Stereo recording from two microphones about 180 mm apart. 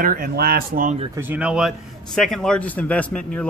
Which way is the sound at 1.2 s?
10° right (ahead or behind).